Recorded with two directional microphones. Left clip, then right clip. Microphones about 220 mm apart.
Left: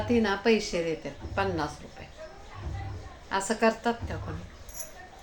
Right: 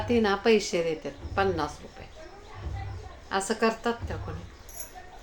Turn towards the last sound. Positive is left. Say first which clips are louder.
# left 1 dB
turn(degrees=-15)  # may be behind; listen again after turning